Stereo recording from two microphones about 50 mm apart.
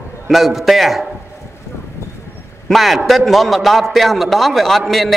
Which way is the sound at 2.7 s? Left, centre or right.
Centre.